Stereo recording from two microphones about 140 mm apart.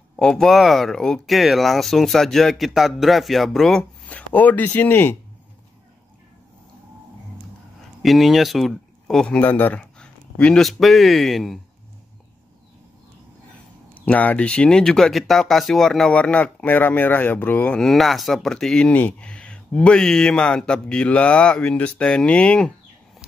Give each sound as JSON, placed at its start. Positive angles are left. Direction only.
{"t": 0.1, "sound": "speech", "side_deg": 5}
{"t": 8.0, "sound": "speech", "side_deg": 0}
{"t": 14.0, "sound": "speech", "side_deg": 10}